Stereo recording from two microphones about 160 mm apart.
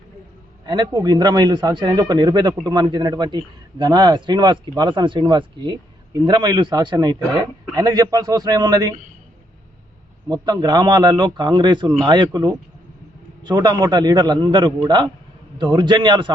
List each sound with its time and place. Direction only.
0.6 s speech: 25° right (ahead or behind)
10.2 s speech: 25° right (ahead or behind)